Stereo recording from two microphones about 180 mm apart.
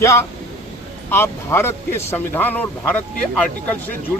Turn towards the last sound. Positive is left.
turn(degrees=10)  # may be behind; listen again after turning